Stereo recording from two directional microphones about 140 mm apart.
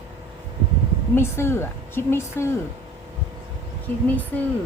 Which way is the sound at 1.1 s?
15° left (ahead or behind).